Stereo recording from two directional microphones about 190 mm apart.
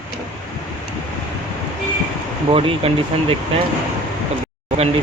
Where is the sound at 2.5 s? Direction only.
30° right (ahead or behind).